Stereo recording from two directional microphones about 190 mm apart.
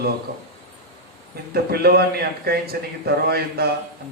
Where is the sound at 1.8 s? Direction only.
55° right (ahead or behind).